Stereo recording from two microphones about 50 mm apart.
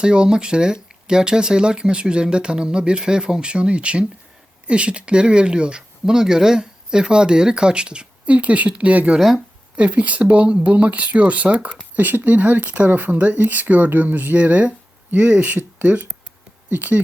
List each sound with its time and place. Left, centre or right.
0.0 s speech: centre
11.9 s speech: right